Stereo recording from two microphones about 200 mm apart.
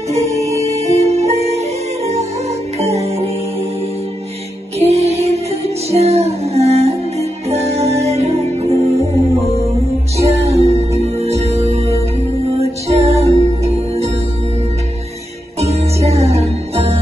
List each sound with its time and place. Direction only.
0.1 s music: 35° right (ahead or behind)
4.7 s music: 30° right (ahead or behind)
15.6 s music: 30° right (ahead or behind)